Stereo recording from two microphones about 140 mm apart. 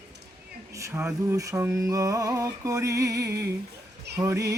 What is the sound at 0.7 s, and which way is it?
Speech, 20° right (ahead or behind).